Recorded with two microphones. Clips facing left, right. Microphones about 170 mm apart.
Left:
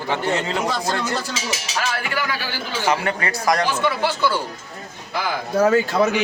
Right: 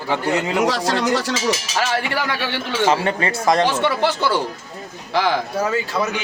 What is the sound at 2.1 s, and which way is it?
Speech, 70° right (ahead or behind).